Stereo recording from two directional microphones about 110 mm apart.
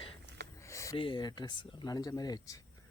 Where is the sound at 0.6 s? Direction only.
25° left (ahead or behind).